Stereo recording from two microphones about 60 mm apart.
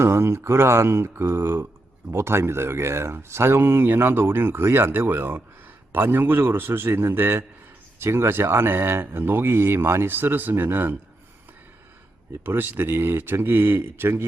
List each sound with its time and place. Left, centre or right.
0.0 s speech: right
12.3 s speech: right